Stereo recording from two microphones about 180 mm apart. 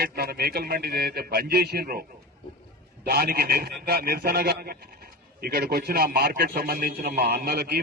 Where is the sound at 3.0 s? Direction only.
60° right (ahead or behind).